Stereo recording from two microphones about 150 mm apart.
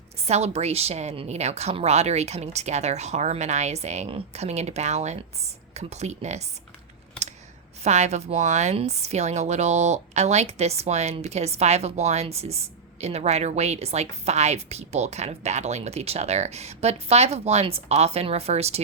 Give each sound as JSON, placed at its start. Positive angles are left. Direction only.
{"t": 0.2, "sound": "a woman's voice", "side_deg": -45}
{"t": 7.8, "sound": "a woman's voice", "side_deg": -50}